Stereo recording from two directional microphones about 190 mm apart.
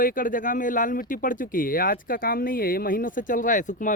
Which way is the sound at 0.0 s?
45° left (ahead or behind).